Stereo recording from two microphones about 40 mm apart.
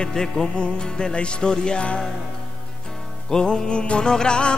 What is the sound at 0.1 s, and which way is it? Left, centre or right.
Music, centre.